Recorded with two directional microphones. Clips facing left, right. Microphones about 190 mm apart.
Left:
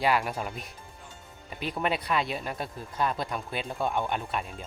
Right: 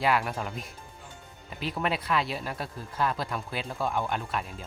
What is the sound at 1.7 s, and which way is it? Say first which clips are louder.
Speech: even; centre (ahead or behind).